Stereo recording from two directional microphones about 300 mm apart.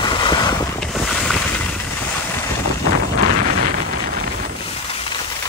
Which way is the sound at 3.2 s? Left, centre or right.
Right.